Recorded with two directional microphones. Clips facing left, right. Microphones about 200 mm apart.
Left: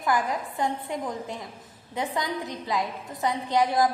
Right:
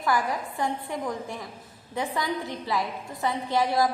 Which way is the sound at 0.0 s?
20° left (ahead or behind).